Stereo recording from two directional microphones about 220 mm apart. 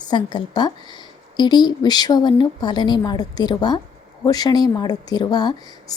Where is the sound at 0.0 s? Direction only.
20° left (ahead or behind).